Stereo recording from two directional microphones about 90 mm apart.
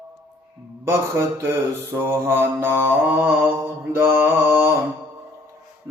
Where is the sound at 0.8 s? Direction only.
30° right (ahead or behind).